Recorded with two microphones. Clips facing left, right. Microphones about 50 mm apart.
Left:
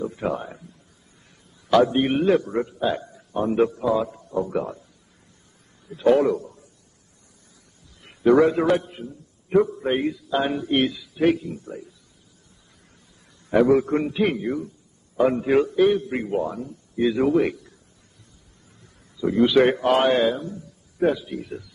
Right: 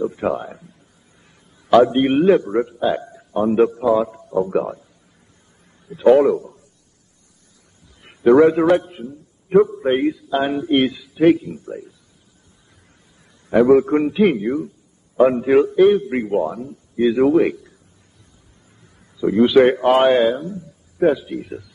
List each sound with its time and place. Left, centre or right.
0.0 s speech: centre
1.7 s a man's voice: centre
5.9 s a man's voice: centre
8.0 s a man's voice: centre
13.7 s a man's voice: centre
19.1 s a man's voice: centre